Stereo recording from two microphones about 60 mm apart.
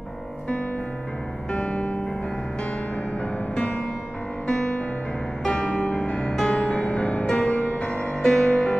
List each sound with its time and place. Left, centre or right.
1.5 s music: centre
3.2 s music: left
4.5 s music: centre